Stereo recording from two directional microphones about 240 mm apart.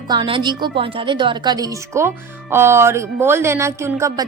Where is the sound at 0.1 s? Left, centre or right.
Centre.